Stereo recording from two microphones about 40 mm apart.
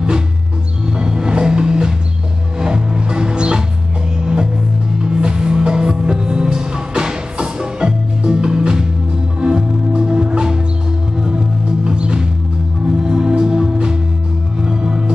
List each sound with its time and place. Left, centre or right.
0.8 s music: centre